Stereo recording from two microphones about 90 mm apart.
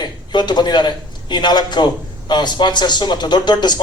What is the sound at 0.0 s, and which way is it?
A man's voice, 55° left (ahead or behind).